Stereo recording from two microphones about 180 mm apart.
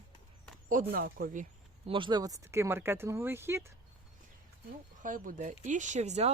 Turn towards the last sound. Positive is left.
turn(degrees=-40)  # may be behind; listen again after turning